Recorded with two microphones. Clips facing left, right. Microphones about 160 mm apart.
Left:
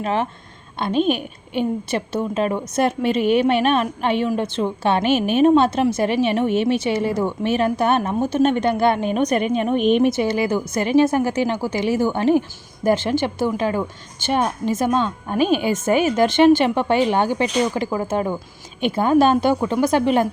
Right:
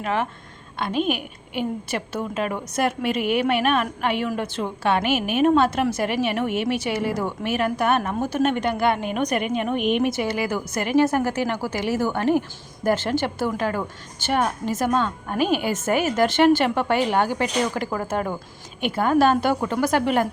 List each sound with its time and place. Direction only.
0.0 s a woman's voice: 25° left (ahead or behind)